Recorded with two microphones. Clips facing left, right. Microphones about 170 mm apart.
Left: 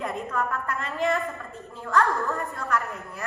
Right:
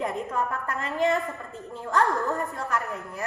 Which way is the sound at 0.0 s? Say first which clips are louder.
Right 1 dB; 20° right (ahead or behind).